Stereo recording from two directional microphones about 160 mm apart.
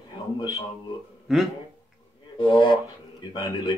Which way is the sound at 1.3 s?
Centre (ahead or behind).